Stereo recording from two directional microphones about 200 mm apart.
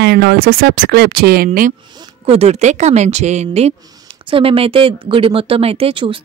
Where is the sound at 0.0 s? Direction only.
55° right (ahead or behind).